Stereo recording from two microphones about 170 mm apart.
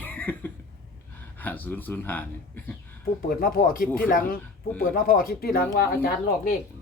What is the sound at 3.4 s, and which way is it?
Speech, 55° left (ahead or behind).